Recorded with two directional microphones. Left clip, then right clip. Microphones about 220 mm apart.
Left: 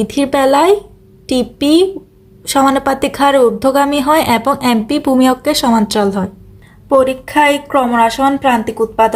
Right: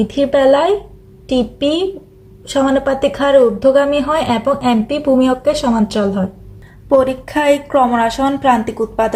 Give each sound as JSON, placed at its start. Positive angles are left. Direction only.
{"t": 0.0, "sound": "a woman's voice", "side_deg": 50}
{"t": 6.8, "sound": "a woman's voice", "side_deg": 10}